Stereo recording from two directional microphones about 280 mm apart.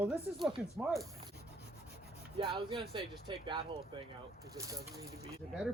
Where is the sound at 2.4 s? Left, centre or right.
Centre.